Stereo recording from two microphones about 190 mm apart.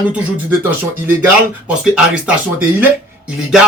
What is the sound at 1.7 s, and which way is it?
Music, 5° right (ahead or behind).